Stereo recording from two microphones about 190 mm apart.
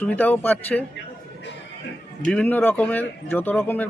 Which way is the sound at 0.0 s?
10° left (ahead or behind).